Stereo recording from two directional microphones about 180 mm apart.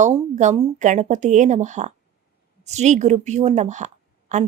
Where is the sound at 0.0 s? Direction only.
35° right (ahead or behind).